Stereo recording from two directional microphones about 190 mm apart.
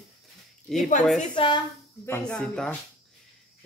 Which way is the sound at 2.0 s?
10° left (ahead or behind).